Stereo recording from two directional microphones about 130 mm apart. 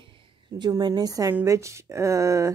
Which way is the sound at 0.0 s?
40° right (ahead or behind).